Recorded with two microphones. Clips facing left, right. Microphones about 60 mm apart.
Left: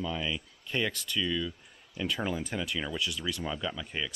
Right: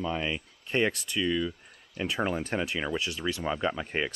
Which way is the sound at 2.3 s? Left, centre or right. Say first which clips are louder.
Right 3 dB; right.